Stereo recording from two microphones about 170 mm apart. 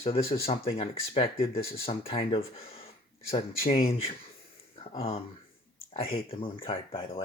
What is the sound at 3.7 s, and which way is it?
Speech, 55° left (ahead or behind).